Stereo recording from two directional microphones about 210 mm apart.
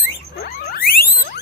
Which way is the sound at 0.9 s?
45° left (ahead or behind).